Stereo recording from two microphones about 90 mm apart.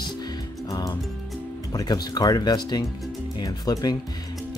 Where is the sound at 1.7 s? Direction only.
50° left (ahead or behind).